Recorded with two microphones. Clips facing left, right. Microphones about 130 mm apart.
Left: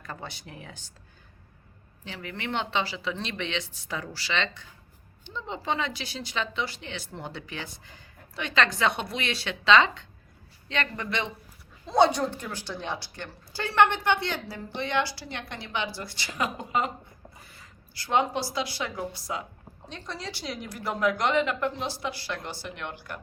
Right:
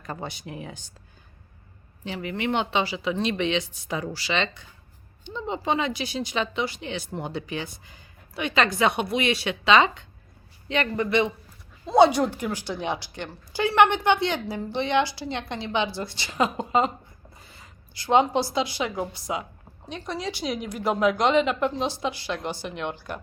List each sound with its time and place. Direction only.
0.0 s a woman's voice: 15° right (ahead or behind)
2.0 s a woman's voice: 15° right (ahead or behind)
17.4 s a sound: 20° right (ahead or behind)
18.5 s a woman's voice: 20° right (ahead or behind)